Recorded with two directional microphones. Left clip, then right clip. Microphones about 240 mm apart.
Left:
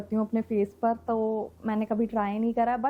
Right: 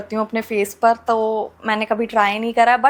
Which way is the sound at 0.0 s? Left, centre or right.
Centre.